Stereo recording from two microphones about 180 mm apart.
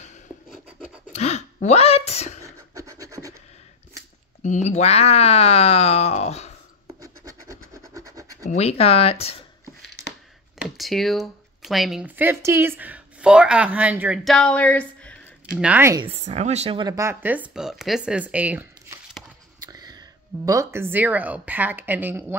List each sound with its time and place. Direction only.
1.1 s a sound: 40° left (ahead or behind)
2.4 s filing: 15° right (ahead or behind)
4.4 s speech: 40° left (ahead or behind)
7.0 s scratch: 15° right (ahead or behind)
8.5 s speech: 35° left (ahead or behind)
10.6 s speech: centre (ahead or behind)
15.5 s speech: 10° right (ahead or behind)
16.0 s speech: 35° right (ahead or behind)
16.8 s speech: 15° right (ahead or behind)
19.6 s speech: 20° right (ahead or behind)